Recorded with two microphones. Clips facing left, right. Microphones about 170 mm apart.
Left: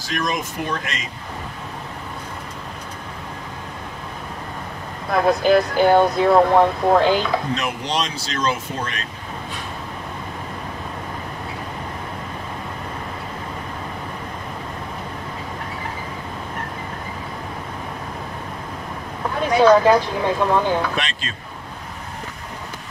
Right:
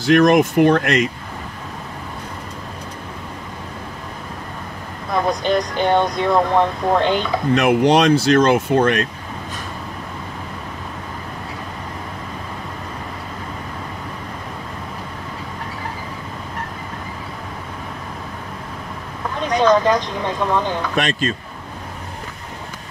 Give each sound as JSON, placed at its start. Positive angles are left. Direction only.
{"t": 0.0, "sound": "speech", "side_deg": -65}
{"t": 5.1, "sound": "speech", "side_deg": 5}
{"t": 7.5, "sound": "speech", "side_deg": -60}
{"t": 19.4, "sound": "a sound", "side_deg": 10}
{"t": 20.9, "sound": "speech", "side_deg": -50}